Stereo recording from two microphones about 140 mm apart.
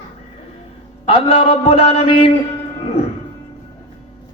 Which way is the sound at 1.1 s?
40° left (ahead or behind).